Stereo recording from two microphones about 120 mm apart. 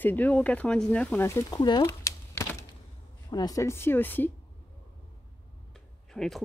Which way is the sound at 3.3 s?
30° left (ahead or behind).